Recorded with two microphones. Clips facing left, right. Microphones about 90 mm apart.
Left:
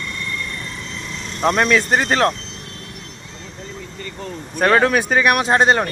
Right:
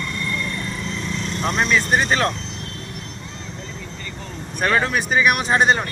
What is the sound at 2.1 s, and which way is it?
Speech, 50° left (ahead or behind).